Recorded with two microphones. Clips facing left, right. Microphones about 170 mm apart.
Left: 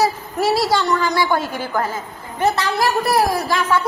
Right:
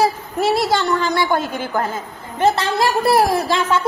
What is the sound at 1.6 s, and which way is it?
A woman's voice, 25° right (ahead or behind).